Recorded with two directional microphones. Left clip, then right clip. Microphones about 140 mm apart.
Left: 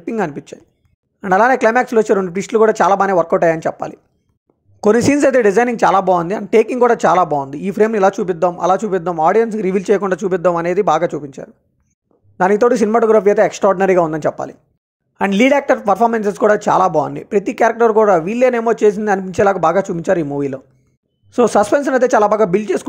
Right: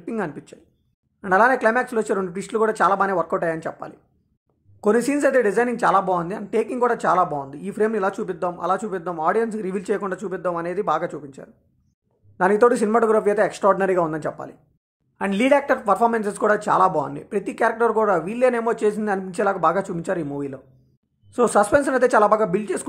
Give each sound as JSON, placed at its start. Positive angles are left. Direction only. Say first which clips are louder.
{"t": 0.0, "sound": "speech", "louder": "left 8 dB", "side_deg": 40}